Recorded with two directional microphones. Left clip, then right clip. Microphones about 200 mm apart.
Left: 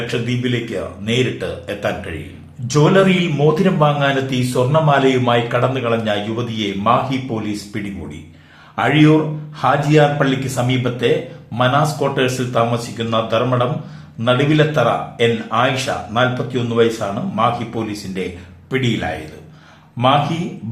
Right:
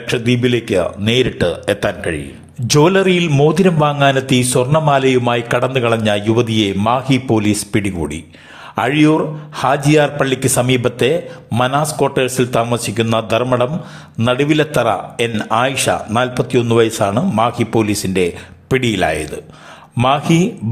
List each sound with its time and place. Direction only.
0.1 s a man's voice: 40° right (ahead or behind)